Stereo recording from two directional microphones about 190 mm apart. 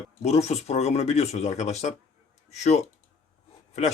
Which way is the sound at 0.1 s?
35° left (ahead or behind).